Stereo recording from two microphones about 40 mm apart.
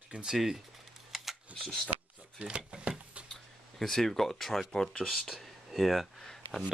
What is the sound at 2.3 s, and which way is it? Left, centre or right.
Speech, right.